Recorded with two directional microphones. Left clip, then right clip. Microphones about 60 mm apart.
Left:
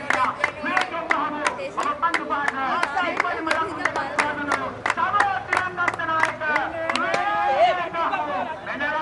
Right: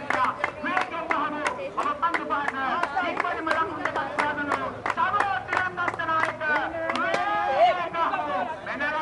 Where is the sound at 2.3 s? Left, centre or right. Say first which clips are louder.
Left 3 dB; right.